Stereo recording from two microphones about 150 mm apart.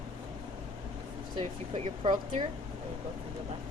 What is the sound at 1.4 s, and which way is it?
Speech, 45° right (ahead or behind).